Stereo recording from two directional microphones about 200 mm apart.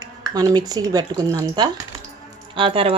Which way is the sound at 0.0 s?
20° right (ahead or behind).